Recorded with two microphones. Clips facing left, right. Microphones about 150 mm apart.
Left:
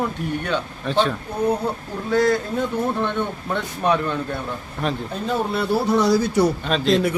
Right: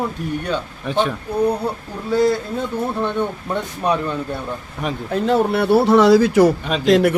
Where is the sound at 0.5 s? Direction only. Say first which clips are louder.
Left 1 dB; 10° right (ahead or behind).